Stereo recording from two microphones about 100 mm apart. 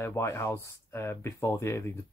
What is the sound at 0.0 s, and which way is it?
Speech, 25° left (ahead or behind).